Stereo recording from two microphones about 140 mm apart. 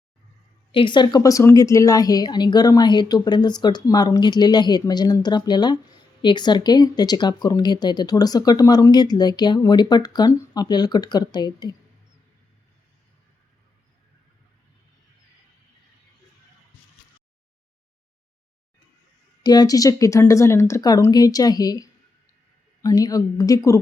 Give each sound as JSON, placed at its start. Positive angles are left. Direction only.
{"t": 0.7, "sound": "speech", "side_deg": 35}
{"t": 19.4, "sound": "speech", "side_deg": 30}